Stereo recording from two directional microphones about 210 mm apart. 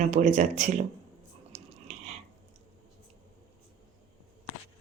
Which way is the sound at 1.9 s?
35° right (ahead or behind).